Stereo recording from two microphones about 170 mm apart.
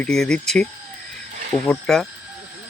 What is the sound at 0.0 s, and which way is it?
Speech, 5° left (ahead or behind).